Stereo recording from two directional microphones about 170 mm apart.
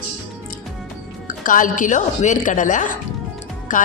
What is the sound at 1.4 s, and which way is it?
A woman's voice, 50° left (ahead or behind).